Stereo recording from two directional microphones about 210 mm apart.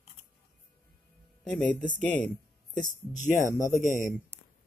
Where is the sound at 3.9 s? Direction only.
40° left (ahead or behind).